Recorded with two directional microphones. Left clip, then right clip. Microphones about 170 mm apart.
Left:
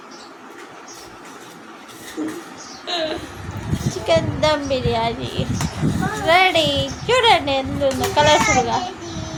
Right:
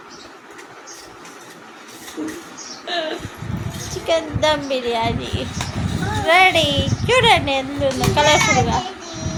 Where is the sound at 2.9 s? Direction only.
70° left (ahead or behind).